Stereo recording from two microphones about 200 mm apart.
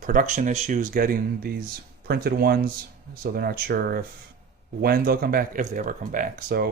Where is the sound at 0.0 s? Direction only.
40° right (ahead or behind).